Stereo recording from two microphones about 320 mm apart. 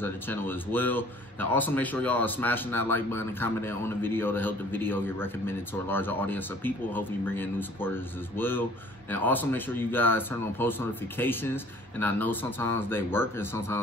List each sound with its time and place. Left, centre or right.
0.0 s a man's voice: centre